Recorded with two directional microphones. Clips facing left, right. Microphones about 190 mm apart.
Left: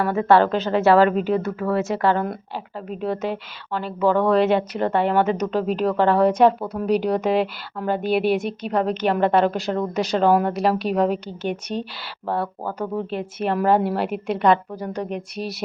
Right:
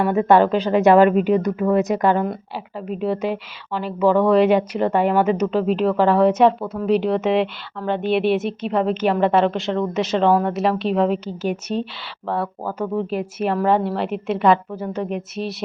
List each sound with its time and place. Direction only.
0.0 s a woman's voice: 15° right (ahead or behind)
2.2 s a woman's voice: 5° right (ahead or behind)
12.2 s a woman's voice: centre (ahead or behind)